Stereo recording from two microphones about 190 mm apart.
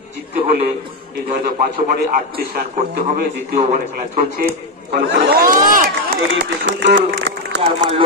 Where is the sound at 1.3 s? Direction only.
50° right (ahead or behind).